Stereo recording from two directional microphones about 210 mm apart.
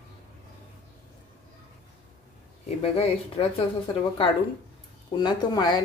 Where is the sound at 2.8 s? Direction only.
30° left (ahead or behind).